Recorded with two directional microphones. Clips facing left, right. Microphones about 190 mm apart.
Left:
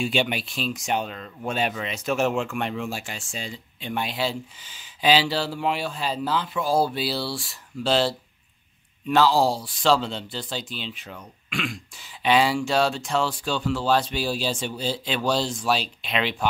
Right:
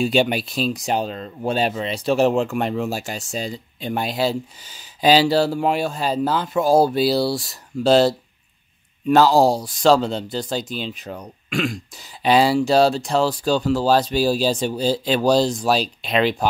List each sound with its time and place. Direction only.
0.0 s speech: 40° right (ahead or behind)